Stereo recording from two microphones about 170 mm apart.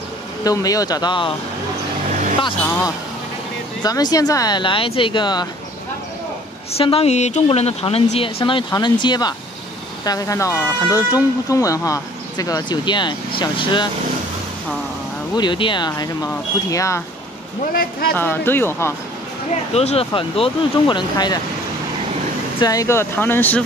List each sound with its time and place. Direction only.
0.4 s speech: 20° left (ahead or behind)
3.8 s speech: 20° left (ahead or behind)
6.8 s speech: 35° left (ahead or behind)
15.3 s speech: 30° left (ahead or behind)
18.1 s speech: 10° left (ahead or behind)
19.7 s speech: 40° left (ahead or behind)
22.6 s speech: 20° left (ahead or behind)